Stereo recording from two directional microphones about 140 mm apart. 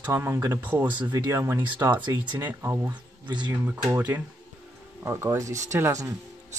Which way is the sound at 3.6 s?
10° right (ahead or behind).